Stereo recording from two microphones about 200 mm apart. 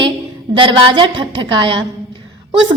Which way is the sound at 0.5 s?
25° right (ahead or behind).